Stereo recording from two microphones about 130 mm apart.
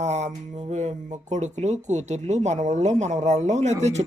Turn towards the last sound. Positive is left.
turn(degrees=-60)  # may be behind; listen again after turning